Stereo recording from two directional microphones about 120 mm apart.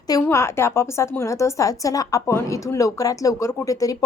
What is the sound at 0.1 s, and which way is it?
A woman's voice, 25° left (ahead or behind).